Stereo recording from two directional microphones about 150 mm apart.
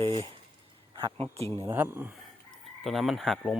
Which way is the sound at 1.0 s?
40° right (ahead or behind).